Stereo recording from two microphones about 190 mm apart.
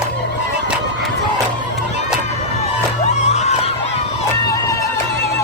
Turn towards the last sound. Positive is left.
turn(degrees=35)  # may be behind; listen again after turning